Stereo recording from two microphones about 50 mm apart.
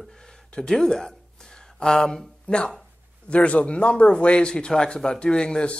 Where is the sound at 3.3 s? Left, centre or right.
Left.